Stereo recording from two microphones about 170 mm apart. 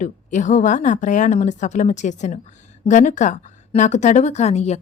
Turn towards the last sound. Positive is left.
turn(degrees=40)  # may be behind; listen again after turning